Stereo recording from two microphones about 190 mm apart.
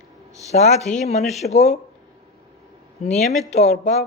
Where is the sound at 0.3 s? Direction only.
35° left (ahead or behind).